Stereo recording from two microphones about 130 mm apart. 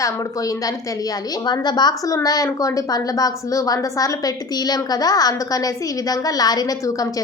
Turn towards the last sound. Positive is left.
turn(degrees=30)  # may be behind; listen again after turning